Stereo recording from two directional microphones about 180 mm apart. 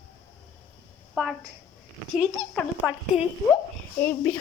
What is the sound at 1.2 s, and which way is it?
Speech, 10° right (ahead or behind).